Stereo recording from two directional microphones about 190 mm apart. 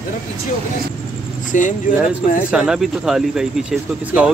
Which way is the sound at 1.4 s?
40° left (ahead or behind).